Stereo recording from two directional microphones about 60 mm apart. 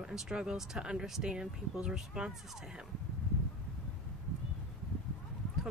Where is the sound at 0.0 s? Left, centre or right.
Centre.